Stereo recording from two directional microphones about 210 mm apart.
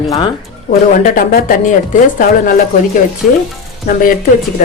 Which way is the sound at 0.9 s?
40° left (ahead or behind).